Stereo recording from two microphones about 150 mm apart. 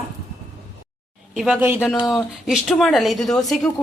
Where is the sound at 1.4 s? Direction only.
10° right (ahead or behind).